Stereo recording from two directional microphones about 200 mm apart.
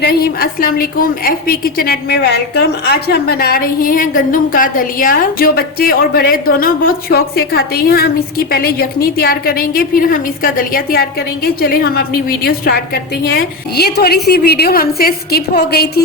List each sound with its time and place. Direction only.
0.0 s a woman's voice: 50° left (ahead or behind)